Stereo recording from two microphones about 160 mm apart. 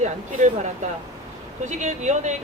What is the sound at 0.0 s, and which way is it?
A woman's voice, 50° right (ahead or behind).